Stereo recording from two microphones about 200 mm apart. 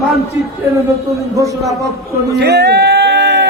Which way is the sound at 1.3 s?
15° right (ahead or behind).